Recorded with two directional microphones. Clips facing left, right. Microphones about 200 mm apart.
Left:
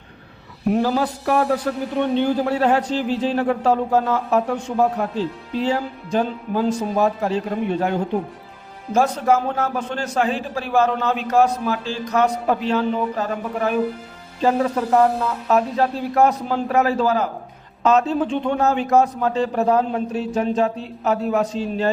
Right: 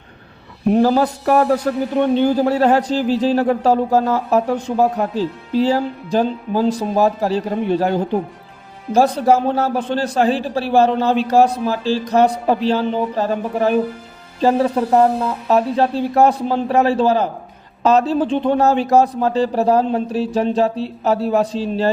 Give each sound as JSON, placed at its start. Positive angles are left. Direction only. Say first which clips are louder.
{"t": 0.7, "sound": "a man's voice", "louder": "right 5 dB", "side_deg": -40}